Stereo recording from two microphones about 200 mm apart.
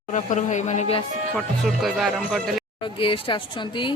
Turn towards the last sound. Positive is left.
turn(degrees=25)  # may be behind; listen again after turning